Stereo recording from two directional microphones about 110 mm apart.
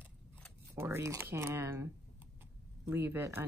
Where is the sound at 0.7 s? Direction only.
25° right (ahead or behind).